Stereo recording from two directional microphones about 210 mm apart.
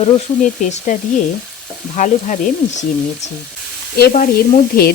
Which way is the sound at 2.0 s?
35° left (ahead or behind).